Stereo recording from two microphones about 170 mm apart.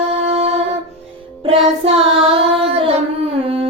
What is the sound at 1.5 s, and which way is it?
Child singing, 35° right (ahead or behind).